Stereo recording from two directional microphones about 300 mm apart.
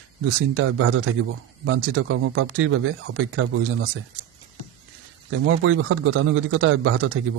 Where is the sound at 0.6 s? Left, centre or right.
Right.